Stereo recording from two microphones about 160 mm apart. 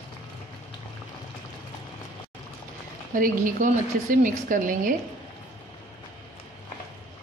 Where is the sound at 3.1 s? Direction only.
60° right (ahead or behind).